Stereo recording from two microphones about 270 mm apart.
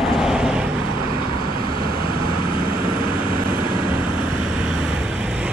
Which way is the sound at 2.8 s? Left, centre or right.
Right.